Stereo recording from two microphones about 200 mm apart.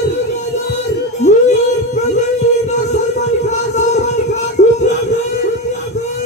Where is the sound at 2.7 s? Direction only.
35° left (ahead or behind).